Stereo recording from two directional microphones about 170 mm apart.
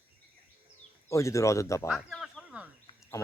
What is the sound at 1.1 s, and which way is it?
Speech, 15° left (ahead or behind).